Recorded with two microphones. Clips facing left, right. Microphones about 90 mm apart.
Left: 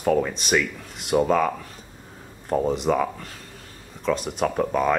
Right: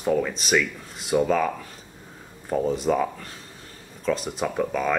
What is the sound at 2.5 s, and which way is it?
Speech, 45° left (ahead or behind).